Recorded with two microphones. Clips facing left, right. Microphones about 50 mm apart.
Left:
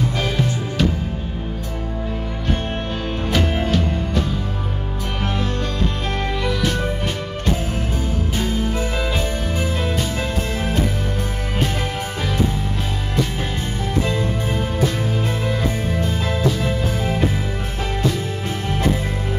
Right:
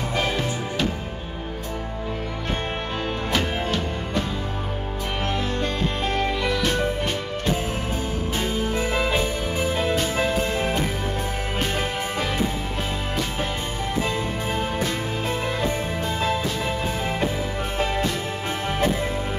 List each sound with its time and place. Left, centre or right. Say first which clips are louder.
3.3 s music: left 5 dB; centre
5.4 s music: left 2 dB; centre
6.2 s music: left 4 dB; centre
8.9 s music: even; centre
14.0 s music: left 3 dB; centre
16.2 s music: left 2 dB; centre